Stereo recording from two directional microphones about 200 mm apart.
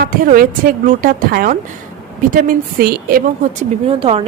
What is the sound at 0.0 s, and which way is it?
A woman's voice, 45° right (ahead or behind).